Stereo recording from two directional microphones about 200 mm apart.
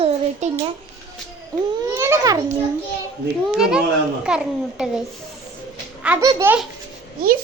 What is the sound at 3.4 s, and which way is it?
A child's voice, 5° right (ahead or behind).